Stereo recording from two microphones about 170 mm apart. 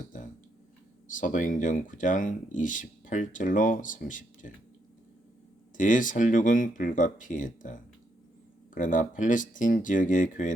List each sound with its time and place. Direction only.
0.1 s a sound: 50° left (ahead or behind)
1.1 s speech: 50° left (ahead or behind)
5.7 s speech: 50° left (ahead or behind)